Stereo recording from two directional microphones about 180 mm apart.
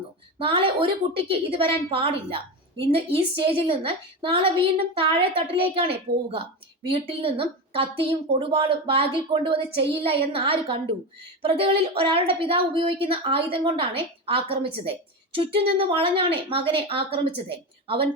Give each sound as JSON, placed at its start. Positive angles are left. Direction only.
{"t": 0.3, "sound": "a woman's voice", "side_deg": -30}